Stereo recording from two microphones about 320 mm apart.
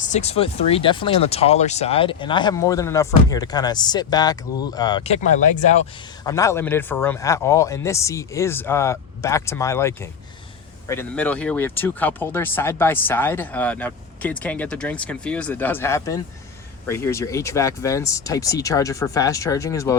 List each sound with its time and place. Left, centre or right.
0.0 s speech: left
6.2 s speech: centre